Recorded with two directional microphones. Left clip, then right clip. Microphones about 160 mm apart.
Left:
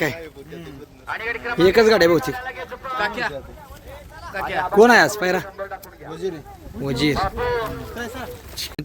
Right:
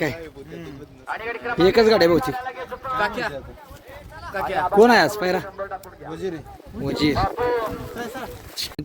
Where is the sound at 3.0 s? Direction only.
90° right.